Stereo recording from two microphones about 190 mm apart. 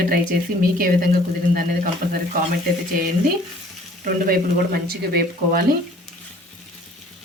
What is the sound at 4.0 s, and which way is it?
A woman's voice, 50° right (ahead or behind).